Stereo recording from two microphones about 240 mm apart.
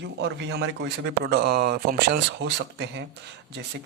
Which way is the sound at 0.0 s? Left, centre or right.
Right.